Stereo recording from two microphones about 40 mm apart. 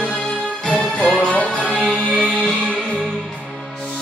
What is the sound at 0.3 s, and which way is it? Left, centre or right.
Music, centre.